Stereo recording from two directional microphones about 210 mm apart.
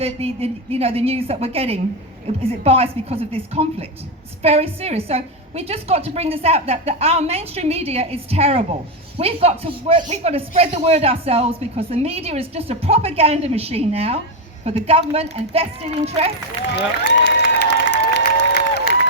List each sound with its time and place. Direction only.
0.0 s speech: 30° right (ahead or behind)
17.2 s applause: 50° left (ahead or behind)